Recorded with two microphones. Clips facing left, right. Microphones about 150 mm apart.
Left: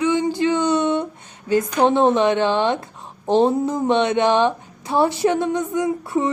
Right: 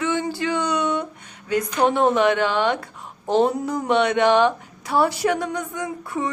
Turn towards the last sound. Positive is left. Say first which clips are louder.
# left 6 dB
turn(degrees=25)  # may be behind; listen again after turning